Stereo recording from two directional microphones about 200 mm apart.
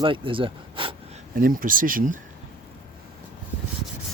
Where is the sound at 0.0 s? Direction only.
25° right (ahead or behind).